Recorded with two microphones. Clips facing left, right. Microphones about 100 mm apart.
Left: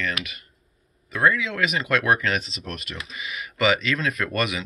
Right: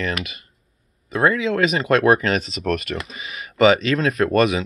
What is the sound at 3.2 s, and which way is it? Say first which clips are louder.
Speech: right 7 dB; 30° right (ahead or behind).